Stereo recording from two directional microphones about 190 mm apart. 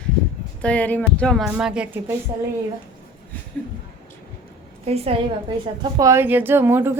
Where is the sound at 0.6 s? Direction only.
5° left (ahead or behind).